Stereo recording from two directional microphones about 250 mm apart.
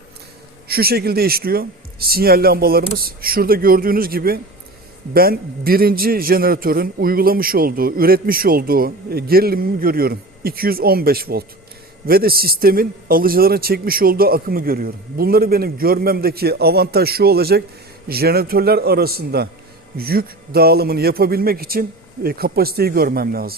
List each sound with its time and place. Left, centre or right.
0.7 s a man's voice: right